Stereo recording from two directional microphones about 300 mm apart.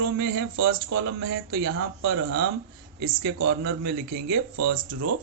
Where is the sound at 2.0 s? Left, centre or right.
Right.